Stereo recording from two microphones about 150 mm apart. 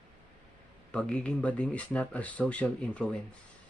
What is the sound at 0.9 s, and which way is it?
Speech, 5° left (ahead or behind).